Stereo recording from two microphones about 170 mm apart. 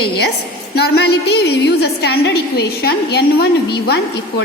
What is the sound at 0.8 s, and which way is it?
A woman's voice, 75° left (ahead or behind).